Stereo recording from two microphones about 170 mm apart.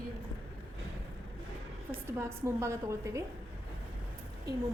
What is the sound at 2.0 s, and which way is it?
A woman's voice, 15° right (ahead or behind).